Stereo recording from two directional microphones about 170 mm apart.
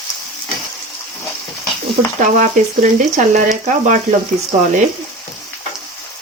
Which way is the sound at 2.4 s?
50° right (ahead or behind).